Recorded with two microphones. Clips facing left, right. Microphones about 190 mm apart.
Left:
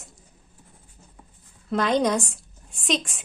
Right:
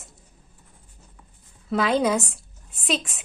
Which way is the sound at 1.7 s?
5° right (ahead or behind).